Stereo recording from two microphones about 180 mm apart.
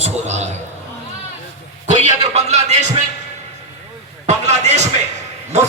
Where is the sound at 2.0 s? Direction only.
40° right (ahead or behind).